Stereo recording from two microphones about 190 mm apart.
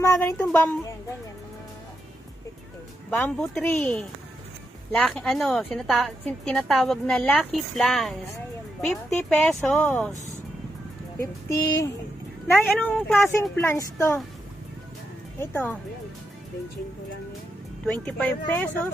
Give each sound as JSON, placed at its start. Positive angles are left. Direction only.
{"t": 0.0, "sound": "speech", "side_deg": 10}
{"t": 3.2, "sound": "a woman's voice", "side_deg": 5}
{"t": 11.1, "sound": "child singing", "side_deg": 15}
{"t": 12.5, "sound": "a woman's voice", "side_deg": 0}
{"t": 13.6, "sound": "child singing", "side_deg": 15}
{"t": 15.3, "sound": "child singing", "side_deg": 10}
{"t": 17.8, "sound": "a woman's voice", "side_deg": 5}